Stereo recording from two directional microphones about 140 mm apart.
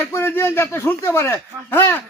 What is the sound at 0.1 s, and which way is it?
A man's voice, 15° left (ahead or behind).